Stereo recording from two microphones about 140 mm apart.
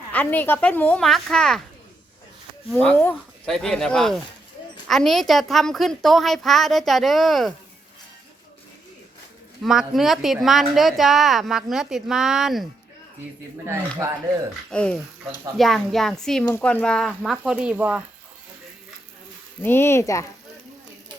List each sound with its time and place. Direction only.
0.1 s speech: 10° left (ahead or behind)
2.7 s speech: 10° left (ahead or behind)
9.6 s speech: centre (ahead or behind)
14.7 s speech: 5° left (ahead or behind); by 18.0 s 10° right (ahead or behind)
19.6 s speech: 15° left (ahead or behind)